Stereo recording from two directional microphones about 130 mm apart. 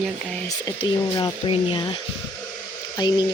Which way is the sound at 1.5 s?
40° left (ahead or behind).